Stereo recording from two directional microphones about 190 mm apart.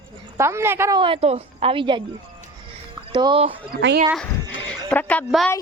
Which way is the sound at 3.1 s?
25° right (ahead or behind).